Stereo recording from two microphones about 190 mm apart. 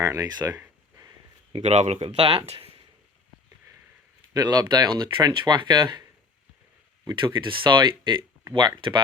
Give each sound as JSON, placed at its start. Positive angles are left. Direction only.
{"t": 0.0, "sound": "a sound", "side_deg": -15}
{"t": 1.5, "sound": "speech", "side_deg": -35}
{"t": 4.4, "sound": "speech", "side_deg": -20}